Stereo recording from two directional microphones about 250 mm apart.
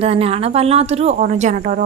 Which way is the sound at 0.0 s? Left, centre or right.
Right.